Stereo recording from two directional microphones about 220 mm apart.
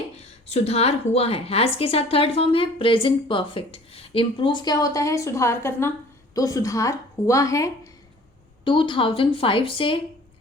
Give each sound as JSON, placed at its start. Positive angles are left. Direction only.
{"t": 0.2, "sound": "a woman's voice", "side_deg": 30}